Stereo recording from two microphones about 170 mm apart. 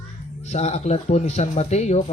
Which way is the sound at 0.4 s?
40° left (ahead or behind).